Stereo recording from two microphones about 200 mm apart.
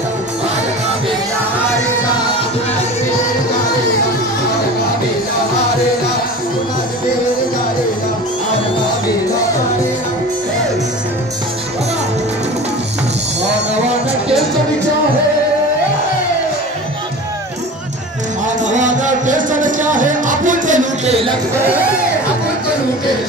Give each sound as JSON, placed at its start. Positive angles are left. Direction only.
{"t": 18.7, "sound": "music", "side_deg": -40}